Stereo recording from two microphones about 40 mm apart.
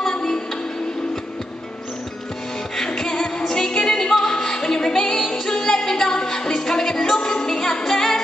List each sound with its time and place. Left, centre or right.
0.1 s music: centre
3.0 s music: centre